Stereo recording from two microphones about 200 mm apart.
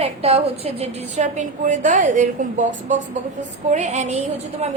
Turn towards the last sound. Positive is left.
turn(degrees=-30)  # may be behind; listen again after turning